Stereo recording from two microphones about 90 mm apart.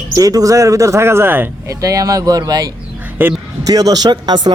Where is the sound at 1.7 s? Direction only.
40° right (ahead or behind).